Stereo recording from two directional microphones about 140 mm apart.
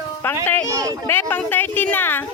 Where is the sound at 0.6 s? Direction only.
25° right (ahead or behind).